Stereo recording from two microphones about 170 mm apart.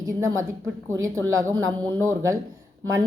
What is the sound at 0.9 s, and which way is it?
A woman's voice, 20° right (ahead or behind).